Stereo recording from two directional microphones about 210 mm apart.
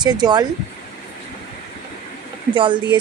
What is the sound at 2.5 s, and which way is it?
Speech, 20° right (ahead or behind).